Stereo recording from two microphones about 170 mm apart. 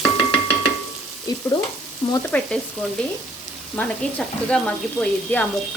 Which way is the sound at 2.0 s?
25° left (ahead or behind).